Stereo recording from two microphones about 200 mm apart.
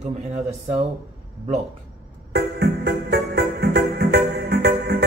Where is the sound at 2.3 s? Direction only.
55° right (ahead or behind).